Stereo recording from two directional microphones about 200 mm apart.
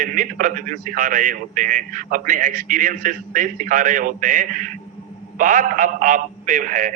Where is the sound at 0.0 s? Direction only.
40° right (ahead or behind).